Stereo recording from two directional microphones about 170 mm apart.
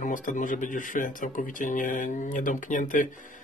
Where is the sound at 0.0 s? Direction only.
50° left (ahead or behind).